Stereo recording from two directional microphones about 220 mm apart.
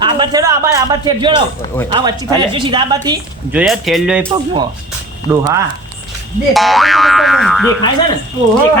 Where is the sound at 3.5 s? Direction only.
5° right (ahead or behind).